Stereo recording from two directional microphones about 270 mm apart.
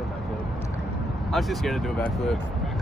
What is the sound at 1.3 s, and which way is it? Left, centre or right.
Speech, centre.